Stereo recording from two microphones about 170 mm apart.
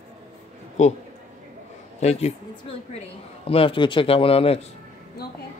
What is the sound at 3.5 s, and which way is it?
A man's voice, 30° left (ahead or behind).